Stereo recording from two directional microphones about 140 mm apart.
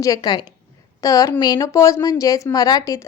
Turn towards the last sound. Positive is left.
turn(degrees=25)  # may be behind; listen again after turning